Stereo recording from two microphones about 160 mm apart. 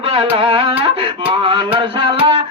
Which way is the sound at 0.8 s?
35° right (ahead or behind).